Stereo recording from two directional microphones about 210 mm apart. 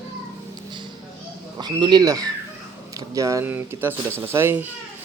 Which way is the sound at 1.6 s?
20° right (ahead or behind).